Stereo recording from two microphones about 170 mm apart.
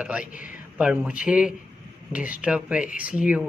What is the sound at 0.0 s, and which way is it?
Speech, 5° right (ahead or behind).